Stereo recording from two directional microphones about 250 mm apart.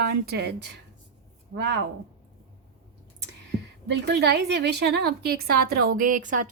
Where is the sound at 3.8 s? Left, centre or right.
Right.